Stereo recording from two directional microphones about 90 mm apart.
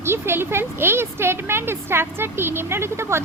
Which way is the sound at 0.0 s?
25° right (ahead or behind).